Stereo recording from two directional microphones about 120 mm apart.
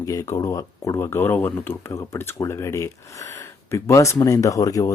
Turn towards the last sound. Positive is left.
turn(degrees=30)  # may be behind; listen again after turning